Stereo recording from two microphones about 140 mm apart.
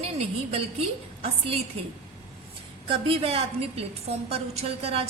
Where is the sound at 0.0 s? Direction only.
45° right (ahead or behind).